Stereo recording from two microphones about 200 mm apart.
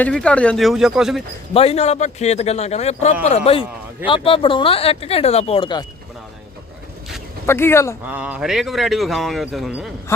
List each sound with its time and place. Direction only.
0.0 s speech: 5° left (ahead or behind)
1.5 s a man's voice: 30° left (ahead or behind)
7.4 s speech: 10° left (ahead or behind)
8.0 s speech: 5° right (ahead or behind)
10.1 s speech: 15° left (ahead or behind)